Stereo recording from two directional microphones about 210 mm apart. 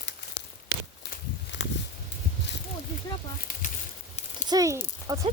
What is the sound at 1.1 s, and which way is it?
Walk, 55° left (ahead or behind).